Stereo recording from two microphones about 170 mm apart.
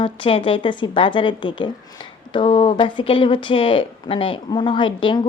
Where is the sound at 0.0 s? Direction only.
30° left (ahead or behind).